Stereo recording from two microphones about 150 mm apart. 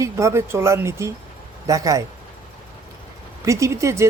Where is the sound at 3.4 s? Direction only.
20° right (ahead or behind).